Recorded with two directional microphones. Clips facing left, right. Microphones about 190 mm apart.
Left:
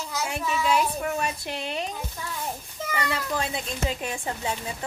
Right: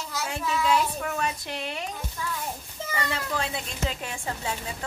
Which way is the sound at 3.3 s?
15° left (ahead or behind).